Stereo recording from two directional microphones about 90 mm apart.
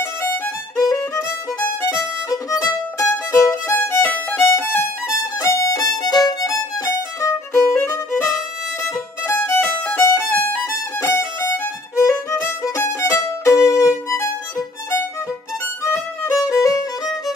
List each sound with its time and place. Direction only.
0.7 s violin: 35° left (ahead or behind)
4.0 s violin: 20° left (ahead or behind)
5.1 s violin: 35° left (ahead or behind)
15.8 s violin: 30° left (ahead or behind)